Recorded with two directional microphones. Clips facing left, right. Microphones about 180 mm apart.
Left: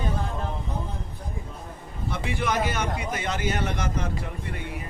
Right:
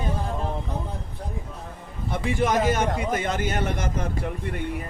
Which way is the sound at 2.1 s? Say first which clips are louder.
Right 4 dB; 45° right (ahead or behind).